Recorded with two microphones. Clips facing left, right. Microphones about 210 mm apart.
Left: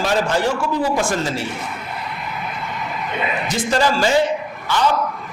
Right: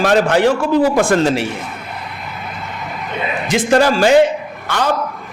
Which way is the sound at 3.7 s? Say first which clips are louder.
Right 6 dB; 60° right (ahead or behind).